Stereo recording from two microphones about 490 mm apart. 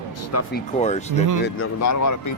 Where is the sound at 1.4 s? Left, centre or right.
Left.